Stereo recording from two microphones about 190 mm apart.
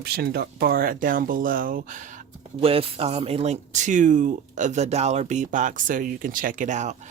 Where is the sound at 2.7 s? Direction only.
30° right (ahead or behind).